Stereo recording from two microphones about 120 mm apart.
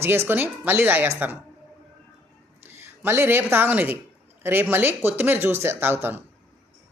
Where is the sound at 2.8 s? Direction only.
20° right (ahead or behind).